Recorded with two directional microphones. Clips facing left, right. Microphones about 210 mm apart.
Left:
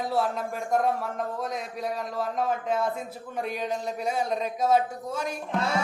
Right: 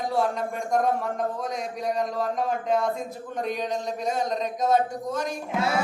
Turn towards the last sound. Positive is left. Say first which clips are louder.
# right 2 dB
turn(degrees=-5)  # may be behind; listen again after turning